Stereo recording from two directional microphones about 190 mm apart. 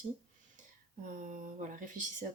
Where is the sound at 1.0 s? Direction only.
40° right (ahead or behind).